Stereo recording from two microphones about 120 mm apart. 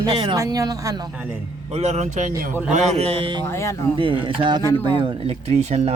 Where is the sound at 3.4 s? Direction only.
25° left (ahead or behind).